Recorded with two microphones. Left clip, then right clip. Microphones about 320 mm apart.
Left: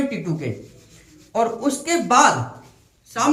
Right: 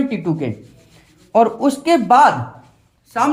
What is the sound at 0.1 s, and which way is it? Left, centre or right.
A man's voice, centre.